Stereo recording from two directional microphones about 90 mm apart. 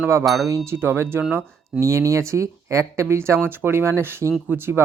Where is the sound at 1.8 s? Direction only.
35° right (ahead or behind).